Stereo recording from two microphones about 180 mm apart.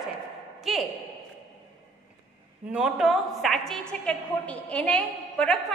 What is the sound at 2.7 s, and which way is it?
A woman's voice, centre (ahead or behind).